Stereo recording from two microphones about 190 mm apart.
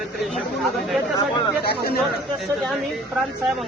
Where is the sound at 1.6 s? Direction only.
55° left (ahead or behind).